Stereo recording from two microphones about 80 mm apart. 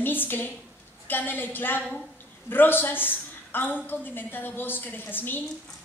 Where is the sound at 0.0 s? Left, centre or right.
Left.